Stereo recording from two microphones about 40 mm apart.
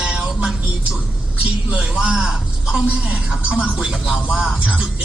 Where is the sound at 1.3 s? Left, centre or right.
Right.